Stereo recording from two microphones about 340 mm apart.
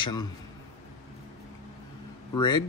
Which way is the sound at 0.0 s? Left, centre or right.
Centre.